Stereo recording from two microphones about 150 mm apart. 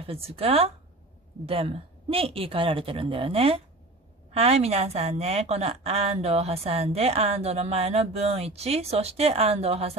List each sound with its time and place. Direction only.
0.0 s a woman's voice: 40° right (ahead or behind)